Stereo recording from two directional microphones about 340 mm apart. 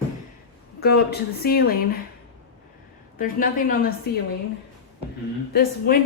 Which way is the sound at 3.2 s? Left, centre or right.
Left.